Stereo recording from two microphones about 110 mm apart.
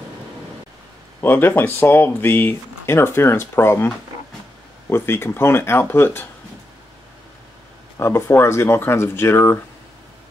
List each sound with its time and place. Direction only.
1.2 s speech: 20° left (ahead or behind)
8.0 s speech: 25° left (ahead or behind)